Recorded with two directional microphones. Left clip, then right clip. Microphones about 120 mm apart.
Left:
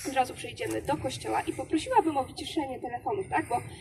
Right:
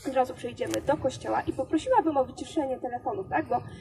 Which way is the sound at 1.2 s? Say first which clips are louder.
Right 2 dB; 10° left (ahead or behind).